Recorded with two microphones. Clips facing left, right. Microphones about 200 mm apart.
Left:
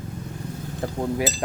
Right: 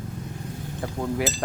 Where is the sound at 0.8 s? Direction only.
35° left (ahead or behind).